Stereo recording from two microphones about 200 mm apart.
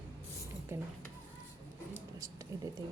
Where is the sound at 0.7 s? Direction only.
10° right (ahead or behind).